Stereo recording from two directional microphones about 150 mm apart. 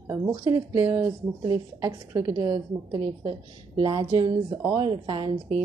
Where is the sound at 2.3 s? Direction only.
30° right (ahead or behind).